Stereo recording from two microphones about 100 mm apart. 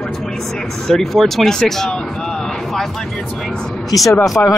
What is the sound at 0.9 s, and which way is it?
Speech, 5° left (ahead or behind).